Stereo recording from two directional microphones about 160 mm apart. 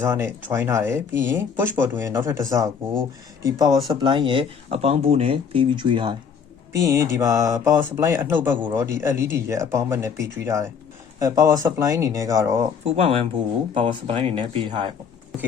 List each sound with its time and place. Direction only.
0.0 s speech: 15° right (ahead or behind); by 6.1 s 30° right (ahead or behind)
6.7 s speech: 20° right (ahead or behind)
12.8 s speech: 40° right (ahead or behind)